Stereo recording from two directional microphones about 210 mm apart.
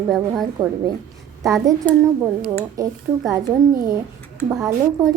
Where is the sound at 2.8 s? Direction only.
15° right (ahead or behind).